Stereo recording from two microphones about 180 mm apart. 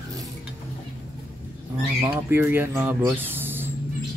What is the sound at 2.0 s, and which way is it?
Speech, 15° right (ahead or behind).